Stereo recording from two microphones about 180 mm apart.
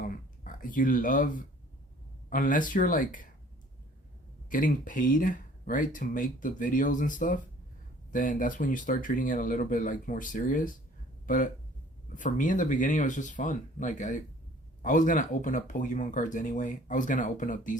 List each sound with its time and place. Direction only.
0.0 s a sound: 50° left (ahead or behind)
2.3 s speech: 45° left (ahead or behind)
4.4 s speech: 50° left (ahead or behind)
12.1 s speech: 45° left (ahead or behind)